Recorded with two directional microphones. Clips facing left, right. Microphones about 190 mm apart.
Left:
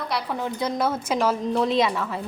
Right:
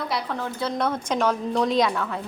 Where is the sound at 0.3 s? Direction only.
15° left (ahead or behind).